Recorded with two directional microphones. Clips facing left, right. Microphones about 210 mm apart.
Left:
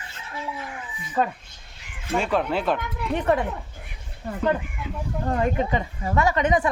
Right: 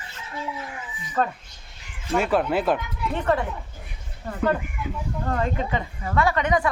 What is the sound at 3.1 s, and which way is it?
Speech, 15° left (ahead or behind).